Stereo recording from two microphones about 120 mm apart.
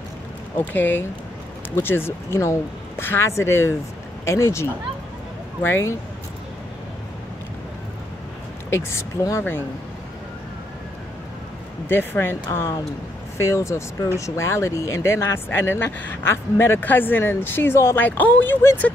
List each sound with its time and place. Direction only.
0.7 s speech: 15° left (ahead or behind)
8.7 s speech: 25° left (ahead or behind)
11.9 s speech: 20° left (ahead or behind)